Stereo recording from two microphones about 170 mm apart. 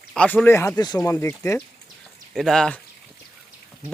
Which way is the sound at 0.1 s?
5° left (ahead or behind).